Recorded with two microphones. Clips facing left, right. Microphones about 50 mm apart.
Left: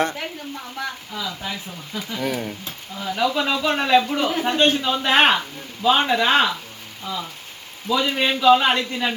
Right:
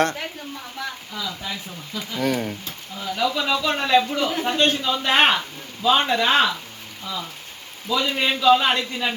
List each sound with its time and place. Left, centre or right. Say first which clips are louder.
0.0 s speech: right 1 dB; centre
2.0 s speech: right 2 dB; centre
3.0 s speech: left 2 dB; centre
3.7 s speech: left 2 dB; centre
4.1 s a man's voice: left 1 dB; centre
4.4 s speech: left 3 dB; centre